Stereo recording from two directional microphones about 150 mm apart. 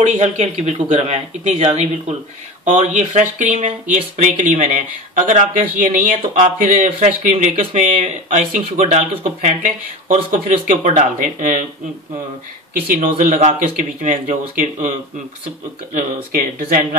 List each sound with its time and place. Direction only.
0.0 s speech: 55° right (ahead or behind)
13.2 s speech: 55° right (ahead or behind)
15.9 s speech: 60° right (ahead or behind)